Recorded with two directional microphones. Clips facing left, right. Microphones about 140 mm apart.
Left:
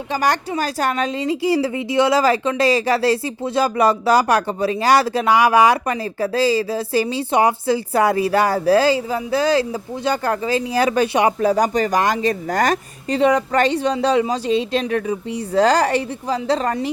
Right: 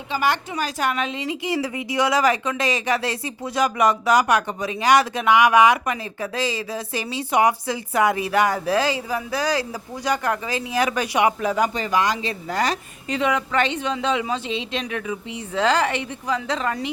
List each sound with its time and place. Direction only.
0.1 s a woman's voice: 40° left (ahead or behind)
13.1 s a woman's voice: 35° left (ahead or behind)